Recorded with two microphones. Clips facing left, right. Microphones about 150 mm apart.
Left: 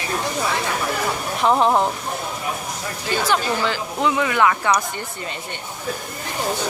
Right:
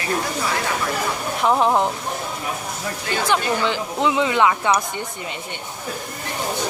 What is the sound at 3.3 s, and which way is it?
Speech, 20° right (ahead or behind).